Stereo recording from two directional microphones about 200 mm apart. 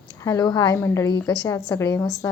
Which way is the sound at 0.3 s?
20° left (ahead or behind).